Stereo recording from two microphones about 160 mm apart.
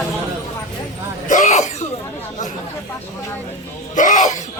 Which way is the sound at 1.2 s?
50° left (ahead or behind).